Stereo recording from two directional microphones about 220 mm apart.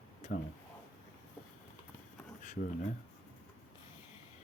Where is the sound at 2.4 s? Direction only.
35° left (ahead or behind).